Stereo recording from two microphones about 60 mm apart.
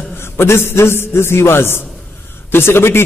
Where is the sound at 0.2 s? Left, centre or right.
Left.